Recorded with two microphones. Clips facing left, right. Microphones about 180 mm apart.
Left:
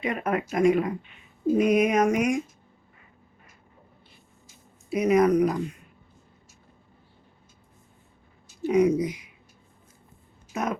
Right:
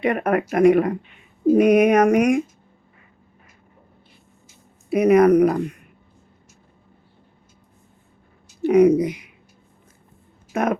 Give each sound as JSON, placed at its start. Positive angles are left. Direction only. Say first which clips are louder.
{"t": 0.0, "sound": "speech", "louder": "right 7 dB", "side_deg": -65}
{"t": 4.9, "sound": "speech", "louder": "right 6 dB", "side_deg": -60}
{"t": 8.6, "sound": "speech", "louder": "right 7 dB", "side_deg": -60}
{"t": 10.5, "sound": "speech", "louder": "right 7 dB", "side_deg": -60}